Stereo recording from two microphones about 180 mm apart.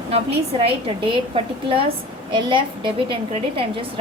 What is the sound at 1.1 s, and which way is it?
A woman's voice, 30° right (ahead or behind).